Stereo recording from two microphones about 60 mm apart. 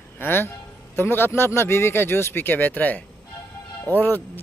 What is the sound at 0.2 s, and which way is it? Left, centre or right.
Speech, left.